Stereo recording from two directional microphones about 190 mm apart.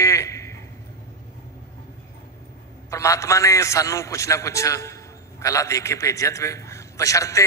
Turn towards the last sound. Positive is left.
turn(degrees=15)  # may be behind; listen again after turning